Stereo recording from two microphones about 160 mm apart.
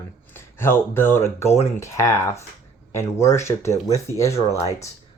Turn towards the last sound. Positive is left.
turn(degrees=20)  # may be behind; listen again after turning